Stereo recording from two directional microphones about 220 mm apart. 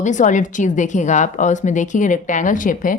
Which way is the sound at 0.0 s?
35° left (ahead or behind).